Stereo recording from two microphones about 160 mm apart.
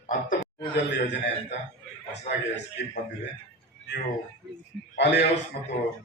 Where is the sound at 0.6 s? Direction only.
65° left (ahead or behind).